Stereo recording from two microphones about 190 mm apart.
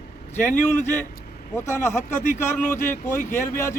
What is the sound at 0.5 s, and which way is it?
Speech, 35° left (ahead or behind).